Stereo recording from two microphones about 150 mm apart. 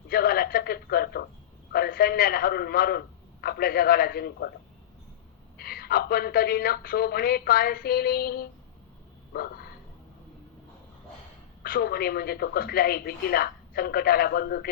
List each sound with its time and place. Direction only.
0.1 s a sound: 80° left
1.7 s a man's voice: 85° left
5.5 s a woman's voice: 90° left
11.6 s a woman's voice: 80° left